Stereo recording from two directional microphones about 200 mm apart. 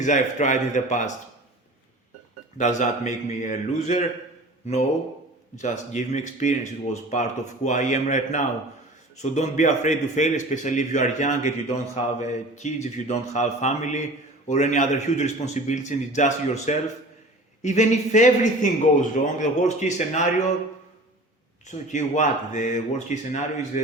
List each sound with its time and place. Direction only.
0.0 s speech: 40° left (ahead or behind)
2.6 s speech: 35° left (ahead or behind)
21.7 s speech: 35° left (ahead or behind)